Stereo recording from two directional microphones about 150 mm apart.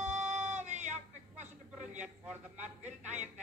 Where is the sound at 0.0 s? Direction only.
55° right (ahead or behind).